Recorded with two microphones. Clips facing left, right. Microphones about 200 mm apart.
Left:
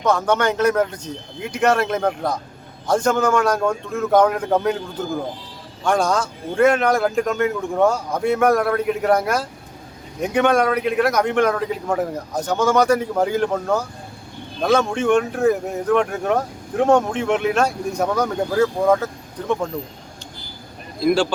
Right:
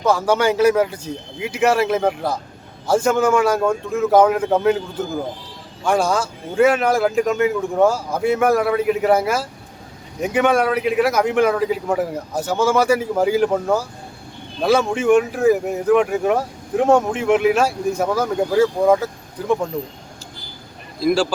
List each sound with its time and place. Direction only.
0.0 s a man's voice: 5° right (ahead or behind)
21.0 s a man's voice: 5° right (ahead or behind)